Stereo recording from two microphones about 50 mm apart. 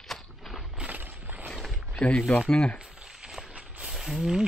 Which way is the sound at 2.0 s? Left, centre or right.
Left.